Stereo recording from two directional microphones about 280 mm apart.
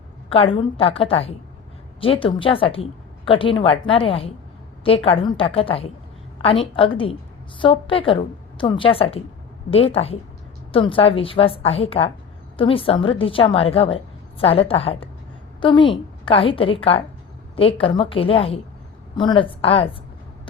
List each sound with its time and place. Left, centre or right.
0.3 s a woman's voice: centre